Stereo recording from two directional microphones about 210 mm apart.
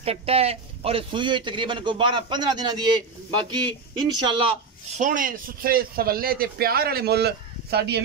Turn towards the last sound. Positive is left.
turn(degrees=-50)  # may be behind; listen again after turning